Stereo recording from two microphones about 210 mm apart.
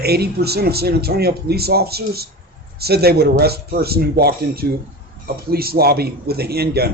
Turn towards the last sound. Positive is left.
turn(degrees=-50)  # may be behind; listen again after turning